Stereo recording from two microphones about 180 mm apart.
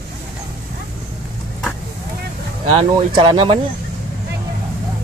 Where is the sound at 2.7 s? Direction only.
25° right (ahead or behind).